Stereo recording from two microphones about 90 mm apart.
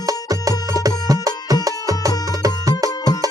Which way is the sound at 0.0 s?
40° right (ahead or behind).